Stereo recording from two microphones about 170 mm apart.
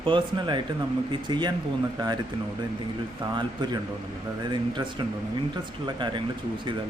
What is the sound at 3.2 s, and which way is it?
Speech, 25° right (ahead or behind).